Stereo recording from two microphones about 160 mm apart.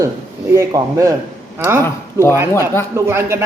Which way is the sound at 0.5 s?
20° right (ahead or behind).